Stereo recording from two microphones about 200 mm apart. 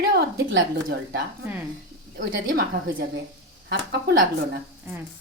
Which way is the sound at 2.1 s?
45° right (ahead or behind).